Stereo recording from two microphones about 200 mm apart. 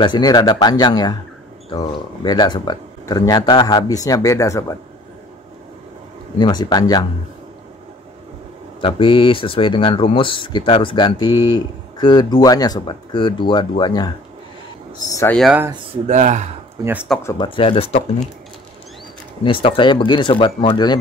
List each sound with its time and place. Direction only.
0.0 s speech: 20° left (ahead or behind)
6.3 s speech: 20° left (ahead or behind)
8.8 s speech: 25° left (ahead or behind)
15.3 s speech: centre (ahead or behind)
16.1 s speech: 35° right (ahead or behind)
16.8 s speech: 5° right (ahead or behind)
17.2 s speech: 15° left (ahead or behind)
17.5 s speech: 25° left (ahead or behind)
19.4 s speech: 25° left (ahead or behind)